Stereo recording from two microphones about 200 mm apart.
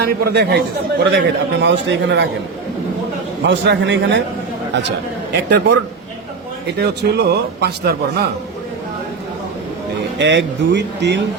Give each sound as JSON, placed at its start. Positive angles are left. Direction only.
{"t": 0.1, "sound": "a man's voice", "side_deg": -55}
{"t": 3.4, "sound": "a man's voice", "side_deg": -60}
{"t": 5.3, "sound": "a man's voice", "side_deg": -55}
{"t": 10.2, "sound": "a man's voice", "side_deg": -60}